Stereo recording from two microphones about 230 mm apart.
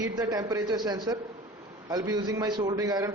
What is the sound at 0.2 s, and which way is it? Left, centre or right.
A man's voice, centre.